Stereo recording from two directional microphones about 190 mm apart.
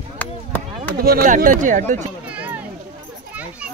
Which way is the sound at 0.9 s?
50° right (ahead or behind).